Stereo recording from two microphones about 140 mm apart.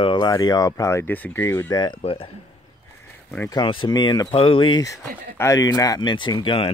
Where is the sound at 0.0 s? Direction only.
30° left (ahead or behind); by 1.8 s 15° left (ahead or behind).